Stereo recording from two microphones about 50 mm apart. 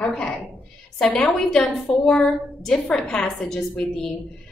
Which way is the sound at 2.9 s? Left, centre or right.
Left.